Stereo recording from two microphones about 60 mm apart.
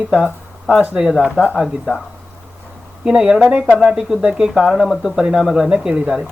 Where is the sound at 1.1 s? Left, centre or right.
Centre.